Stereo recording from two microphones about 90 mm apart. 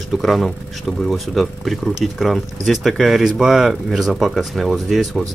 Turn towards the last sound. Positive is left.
turn(degrees=0)  # may be behind; listen again after turning